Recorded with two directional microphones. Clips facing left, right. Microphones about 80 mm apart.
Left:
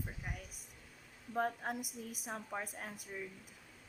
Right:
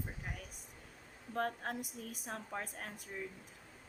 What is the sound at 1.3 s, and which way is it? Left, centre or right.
A woman's voice, centre.